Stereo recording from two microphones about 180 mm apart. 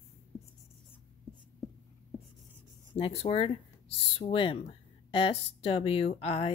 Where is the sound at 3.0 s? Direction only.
35° left (ahead or behind).